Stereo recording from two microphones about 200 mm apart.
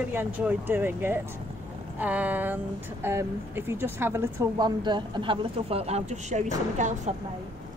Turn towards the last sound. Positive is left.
turn(degrees=-35)  # may be behind; listen again after turning